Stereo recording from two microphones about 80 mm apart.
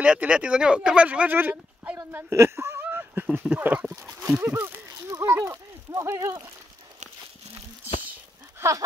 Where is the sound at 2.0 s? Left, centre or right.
Right.